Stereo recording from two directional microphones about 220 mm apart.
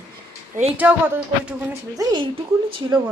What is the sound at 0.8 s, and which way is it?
Speech, 5° right (ahead or behind).